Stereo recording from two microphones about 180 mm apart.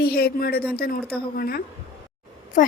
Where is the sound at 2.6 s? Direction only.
45° left (ahead or behind).